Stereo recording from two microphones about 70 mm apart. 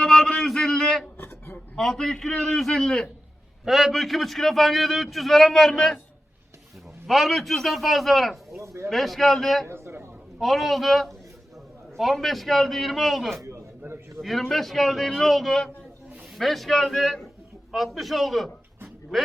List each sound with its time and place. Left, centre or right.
0.0 s a sound: centre
1.8 s a man's voice: centre
7.1 s a man's voice: centre
8.6 s speech: right
8.9 s a man's voice: centre
9.6 s a sound: right
10.3 s a man's voice: centre